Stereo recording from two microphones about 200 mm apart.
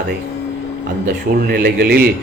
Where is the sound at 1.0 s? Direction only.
50° right (ahead or behind).